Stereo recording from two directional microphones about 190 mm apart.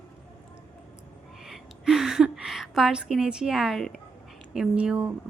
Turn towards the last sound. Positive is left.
turn(degrees=-5)  # may be behind; listen again after turning